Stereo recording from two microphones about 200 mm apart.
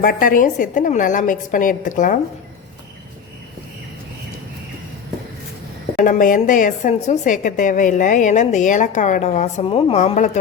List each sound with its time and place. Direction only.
0.0 s a woman's voice: 45° left (ahead or behind)
6.0 s a woman's voice: 40° left (ahead or behind)